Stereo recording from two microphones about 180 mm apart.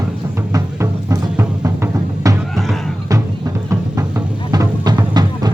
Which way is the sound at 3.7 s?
15° right (ahead or behind).